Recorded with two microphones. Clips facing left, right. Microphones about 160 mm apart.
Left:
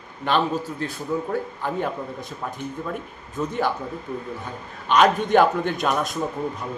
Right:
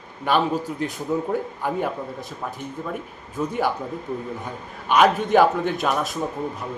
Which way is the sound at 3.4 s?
10° right (ahead or behind).